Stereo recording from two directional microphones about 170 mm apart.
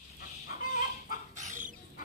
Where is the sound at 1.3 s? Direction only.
45° right (ahead or behind).